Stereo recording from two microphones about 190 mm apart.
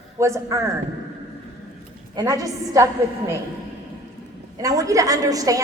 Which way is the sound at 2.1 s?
20° right (ahead or behind).